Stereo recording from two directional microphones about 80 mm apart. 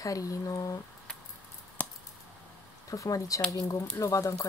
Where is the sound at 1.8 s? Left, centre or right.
Centre.